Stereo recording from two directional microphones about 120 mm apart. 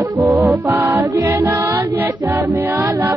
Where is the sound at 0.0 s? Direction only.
20° right (ahead or behind).